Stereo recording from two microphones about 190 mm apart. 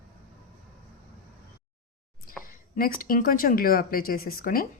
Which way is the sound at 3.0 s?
50° left (ahead or behind).